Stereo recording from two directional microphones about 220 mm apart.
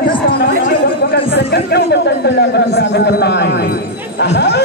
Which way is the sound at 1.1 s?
45° left (ahead or behind).